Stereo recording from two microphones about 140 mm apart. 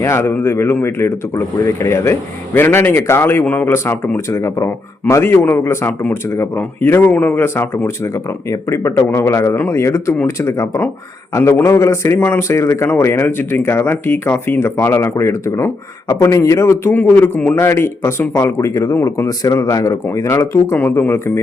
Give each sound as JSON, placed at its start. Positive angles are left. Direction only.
{"t": 0.0, "sound": "speech", "side_deg": 20}